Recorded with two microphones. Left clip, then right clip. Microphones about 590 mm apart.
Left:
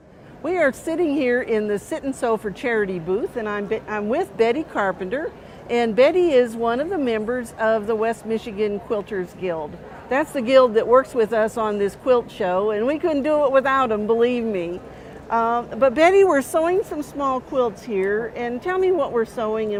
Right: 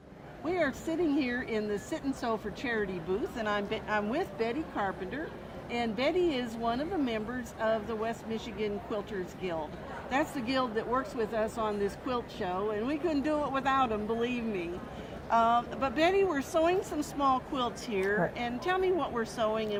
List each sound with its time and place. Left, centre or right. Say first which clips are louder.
0.4 s a woman's voice: left 11 dB; left
10.1 s a woman's voice: left 13 dB; left